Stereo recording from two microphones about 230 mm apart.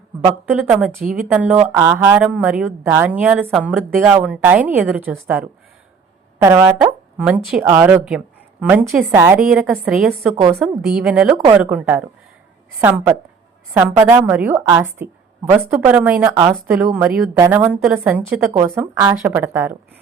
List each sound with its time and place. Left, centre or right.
0.5 s a woman's voice: centre
6.4 s a woman's voice: centre